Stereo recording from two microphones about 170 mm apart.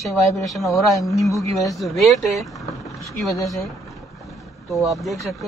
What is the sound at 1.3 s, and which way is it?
Speech, 20° left (ahead or behind).